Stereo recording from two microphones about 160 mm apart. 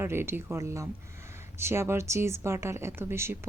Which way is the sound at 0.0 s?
15° right (ahead or behind).